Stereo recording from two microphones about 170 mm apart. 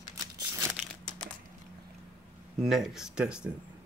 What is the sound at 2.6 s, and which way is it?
Speech, centre (ahead or behind).